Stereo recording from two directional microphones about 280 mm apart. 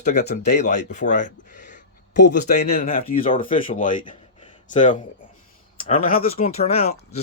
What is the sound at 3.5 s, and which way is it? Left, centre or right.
Speech, left.